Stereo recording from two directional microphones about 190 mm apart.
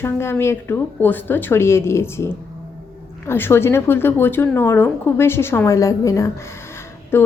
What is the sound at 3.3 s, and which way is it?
Speech, 10° left (ahead or behind).